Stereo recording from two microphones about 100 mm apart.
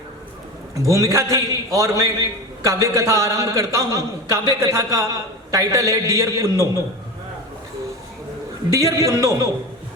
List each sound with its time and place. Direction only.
0.8 s a man's voice: 30° right (ahead or behind)
8.7 s a man's voice: 30° right (ahead or behind)